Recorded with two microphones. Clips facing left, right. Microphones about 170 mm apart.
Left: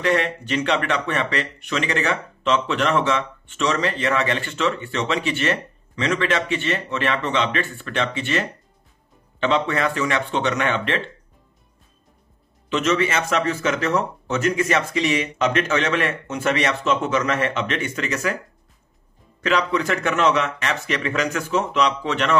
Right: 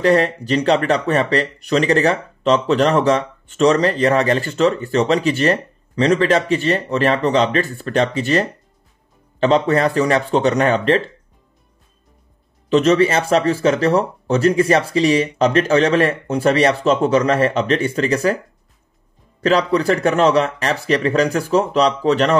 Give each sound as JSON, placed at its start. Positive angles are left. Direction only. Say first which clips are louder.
{"t": 0.0, "sound": "speech", "louder": "right 6 dB", "side_deg": -35}
{"t": 12.6, "sound": "speech", "louder": "right 7 dB", "side_deg": -35}
{"t": 19.4, "sound": "speech", "louder": "right 6 dB", "side_deg": -35}